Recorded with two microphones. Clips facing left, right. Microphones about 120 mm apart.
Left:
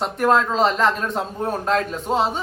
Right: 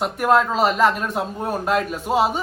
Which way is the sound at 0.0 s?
5° right (ahead or behind).